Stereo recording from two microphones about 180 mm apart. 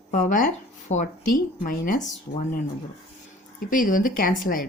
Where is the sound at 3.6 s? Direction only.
50° left (ahead or behind).